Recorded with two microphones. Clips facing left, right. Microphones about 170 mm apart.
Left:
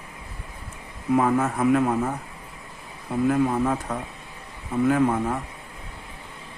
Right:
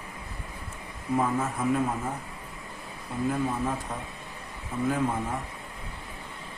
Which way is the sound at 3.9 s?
75° left (ahead or behind).